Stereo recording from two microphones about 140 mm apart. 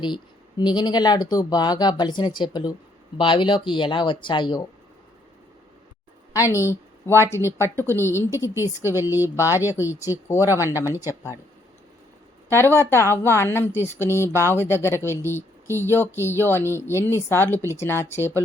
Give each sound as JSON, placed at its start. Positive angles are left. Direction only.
{"t": 0.0, "sound": "speech", "side_deg": 30}
{"t": 6.3, "sound": "speech", "side_deg": 25}
{"t": 7.3, "sound": "speech", "side_deg": -20}
{"t": 7.9, "sound": "speech", "side_deg": 15}
{"t": 12.5, "sound": "speech", "side_deg": 15}
{"t": 15.6, "sound": "speech", "side_deg": -20}
{"t": 15.9, "sound": "speech", "side_deg": 15}